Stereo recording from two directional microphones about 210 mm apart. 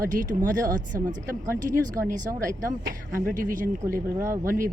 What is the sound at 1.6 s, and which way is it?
Speech, 40° right (ahead or behind).